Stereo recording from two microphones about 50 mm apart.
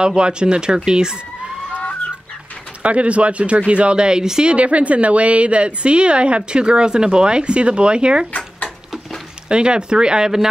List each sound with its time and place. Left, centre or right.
0.0 s speech: centre
2.8 s speech: right
9.5 s speech: centre